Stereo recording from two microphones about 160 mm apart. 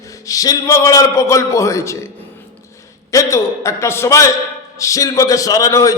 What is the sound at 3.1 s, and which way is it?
A man's voice, 20° left (ahead or behind).